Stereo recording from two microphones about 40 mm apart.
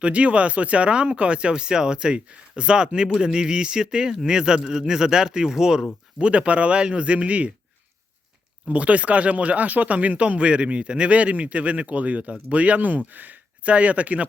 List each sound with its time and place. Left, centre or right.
0.0 s speech: right; by 5.8 s centre
6.1 s speech: right
8.6 s speech: right